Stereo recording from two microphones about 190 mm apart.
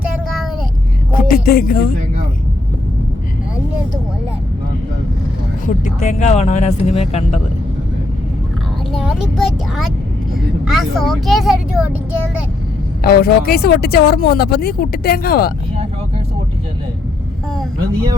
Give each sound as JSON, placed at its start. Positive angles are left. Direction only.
{"t": 1.1, "sound": "a sound", "side_deg": 50}
{"t": 5.6, "sound": "speech", "side_deg": 40}
{"t": 8.9, "sound": "speech", "side_deg": -5}
{"t": 13.0, "sound": "speech", "side_deg": 55}